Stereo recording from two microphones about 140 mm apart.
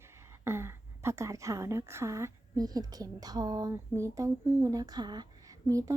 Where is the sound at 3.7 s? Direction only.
20° right (ahead or behind).